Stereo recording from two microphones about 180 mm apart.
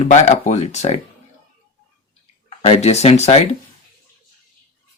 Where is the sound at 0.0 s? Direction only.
40° left (ahead or behind).